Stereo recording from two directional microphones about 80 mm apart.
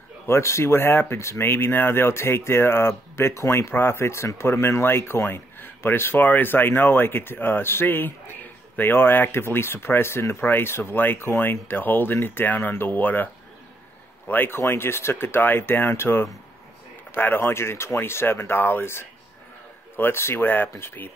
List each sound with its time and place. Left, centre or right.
0.3 s speech: left